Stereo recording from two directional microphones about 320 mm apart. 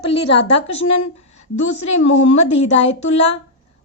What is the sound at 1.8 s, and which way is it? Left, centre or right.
A woman's voice, centre.